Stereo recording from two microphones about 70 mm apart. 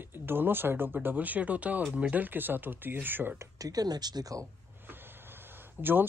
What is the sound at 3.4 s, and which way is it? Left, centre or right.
Speech, right.